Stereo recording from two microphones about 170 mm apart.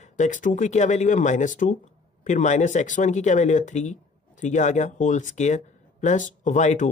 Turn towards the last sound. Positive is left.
turn(degrees=45)  # may be behind; listen again after turning